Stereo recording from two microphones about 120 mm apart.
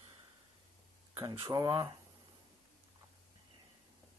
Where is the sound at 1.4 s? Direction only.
30° right (ahead or behind).